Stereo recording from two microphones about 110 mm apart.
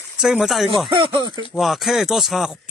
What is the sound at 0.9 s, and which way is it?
Speech, 50° right (ahead or behind).